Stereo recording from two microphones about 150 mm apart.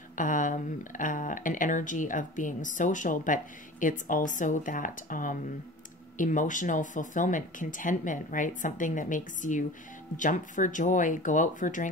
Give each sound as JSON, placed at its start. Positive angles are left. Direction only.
{"t": 0.2, "sound": "speech", "side_deg": 60}